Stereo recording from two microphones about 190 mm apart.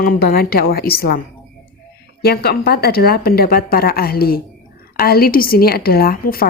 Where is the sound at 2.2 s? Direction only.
55° left (ahead or behind).